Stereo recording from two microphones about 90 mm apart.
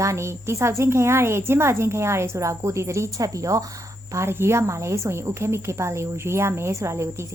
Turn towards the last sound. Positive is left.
turn(degrees=-30)  # may be behind; listen again after turning